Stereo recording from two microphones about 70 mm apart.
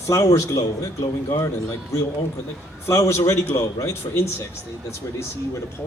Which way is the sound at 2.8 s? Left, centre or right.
Left.